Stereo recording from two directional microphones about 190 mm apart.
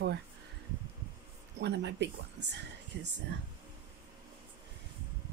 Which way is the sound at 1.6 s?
65° right (ahead or behind).